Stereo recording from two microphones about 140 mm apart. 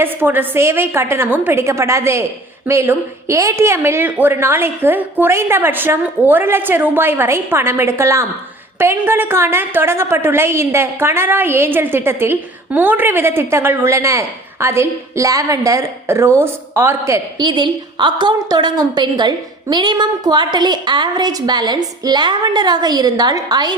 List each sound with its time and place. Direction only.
0.0 s a woman's voice: 15° right (ahead or behind)
17.3 s a woman's voice: 35° right (ahead or behind)